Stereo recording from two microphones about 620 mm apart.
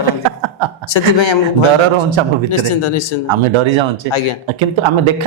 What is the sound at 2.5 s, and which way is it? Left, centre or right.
Speech, left.